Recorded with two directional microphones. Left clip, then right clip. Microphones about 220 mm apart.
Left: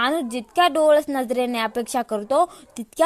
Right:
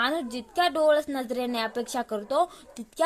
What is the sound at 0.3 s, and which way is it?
A woman's voice, 35° left (ahead or behind).